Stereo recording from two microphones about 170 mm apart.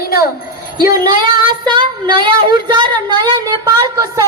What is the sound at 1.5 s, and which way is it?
Speech, 25° right (ahead or behind).